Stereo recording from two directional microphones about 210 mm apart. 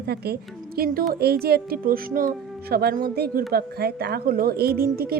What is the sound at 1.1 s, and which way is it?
A woman's voice, 50° right (ahead or behind).